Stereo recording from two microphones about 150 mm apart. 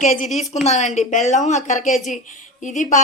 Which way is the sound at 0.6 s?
50° left (ahead or behind).